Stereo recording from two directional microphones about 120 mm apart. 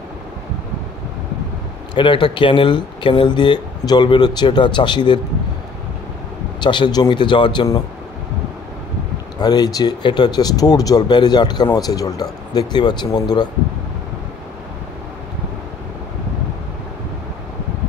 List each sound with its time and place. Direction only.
2.0 s speech: 40° left (ahead or behind)
6.6 s speech: 40° left (ahead or behind)
9.4 s speech: 35° left (ahead or behind)